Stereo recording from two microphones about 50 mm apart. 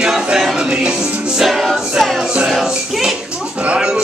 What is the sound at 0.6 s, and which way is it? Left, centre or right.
Music, centre.